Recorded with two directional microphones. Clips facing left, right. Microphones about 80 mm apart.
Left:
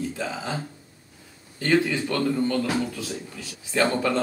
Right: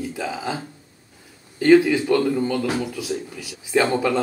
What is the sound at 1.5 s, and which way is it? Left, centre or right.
Speech, centre.